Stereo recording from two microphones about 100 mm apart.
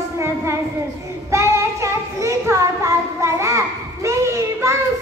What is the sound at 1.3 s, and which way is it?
Child singing, 30° right (ahead or behind).